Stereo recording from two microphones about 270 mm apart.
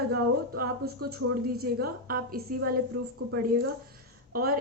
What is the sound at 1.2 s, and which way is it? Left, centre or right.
Speech, right.